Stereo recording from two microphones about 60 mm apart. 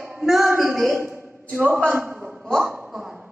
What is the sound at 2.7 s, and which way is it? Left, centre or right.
Hiccup, centre.